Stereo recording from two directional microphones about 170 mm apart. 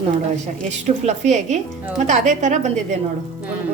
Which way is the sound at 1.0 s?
45° right (ahead or behind).